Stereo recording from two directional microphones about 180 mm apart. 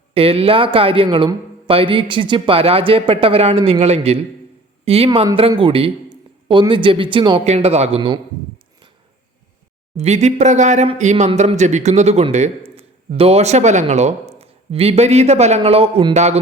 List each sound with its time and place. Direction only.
0.1 s a man's voice: 30° right (ahead or behind)
10.0 s a man's voice: 40° right (ahead or behind)